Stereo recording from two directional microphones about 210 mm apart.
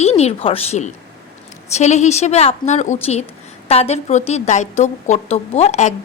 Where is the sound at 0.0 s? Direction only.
30° left (ahead or behind).